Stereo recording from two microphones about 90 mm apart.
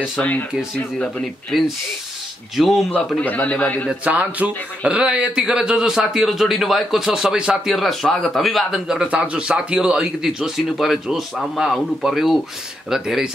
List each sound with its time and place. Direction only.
0.2 s a man's voice: 15° left (ahead or behind)
2.5 s speech: centre (ahead or behind)
2.9 s a man's voice: 15° left (ahead or behind)
3.9 s speech: 15° right (ahead or behind)